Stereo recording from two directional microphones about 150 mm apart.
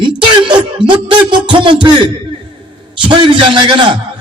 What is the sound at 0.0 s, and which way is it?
Music, 35° right (ahead or behind).